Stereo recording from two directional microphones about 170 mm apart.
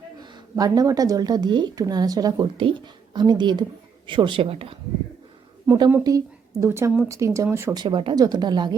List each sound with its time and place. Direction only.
0.2 s a woman's voice: 20° right (ahead or behind)
5.9 s a woman's voice: 20° right (ahead or behind)